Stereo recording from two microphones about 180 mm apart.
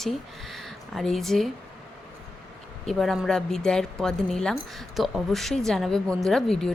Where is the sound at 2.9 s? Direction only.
Centre (ahead or behind).